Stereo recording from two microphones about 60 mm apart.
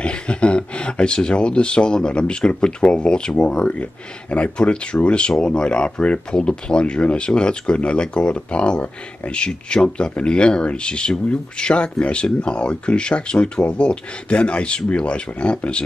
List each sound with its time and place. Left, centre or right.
0.0 s speech: centre